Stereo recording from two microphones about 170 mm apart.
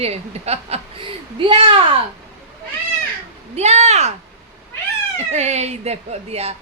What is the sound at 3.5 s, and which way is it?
Speech, 40° right (ahead or behind).